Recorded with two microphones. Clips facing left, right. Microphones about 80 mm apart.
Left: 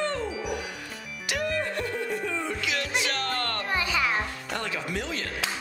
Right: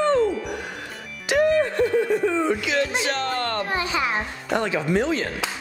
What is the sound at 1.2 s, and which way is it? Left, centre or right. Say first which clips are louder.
Music: right 10 dB; right.